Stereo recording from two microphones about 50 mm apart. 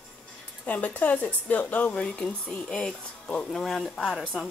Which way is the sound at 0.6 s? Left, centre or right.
Left.